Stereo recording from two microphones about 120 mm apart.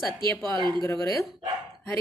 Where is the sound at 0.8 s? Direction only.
25° left (ahead or behind).